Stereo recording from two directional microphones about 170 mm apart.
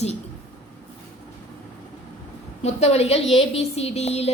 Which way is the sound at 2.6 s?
40° left (ahead or behind).